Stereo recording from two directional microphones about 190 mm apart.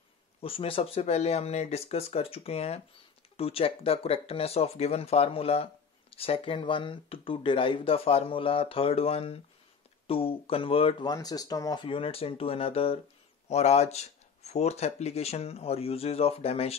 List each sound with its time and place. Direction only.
0.4 s speech: 30° left (ahead or behind)